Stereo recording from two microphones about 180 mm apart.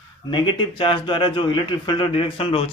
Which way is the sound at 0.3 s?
25° left (ahead or behind).